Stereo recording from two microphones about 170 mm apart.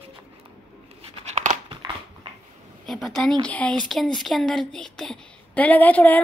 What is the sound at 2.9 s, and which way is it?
Speech, centre (ahead or behind).